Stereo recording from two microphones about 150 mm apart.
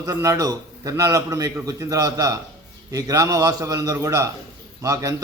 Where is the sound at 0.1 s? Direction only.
20° right (ahead or behind).